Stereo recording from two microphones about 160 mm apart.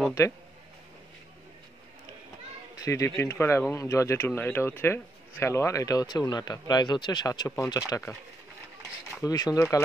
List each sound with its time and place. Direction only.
2.7 s children playing: 20° left (ahead or behind)
3.2 s speech: 15° left (ahead or behind)
9.2 s speech: 25° left (ahead or behind)